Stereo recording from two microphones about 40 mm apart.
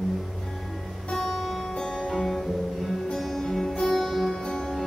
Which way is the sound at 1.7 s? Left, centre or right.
Centre.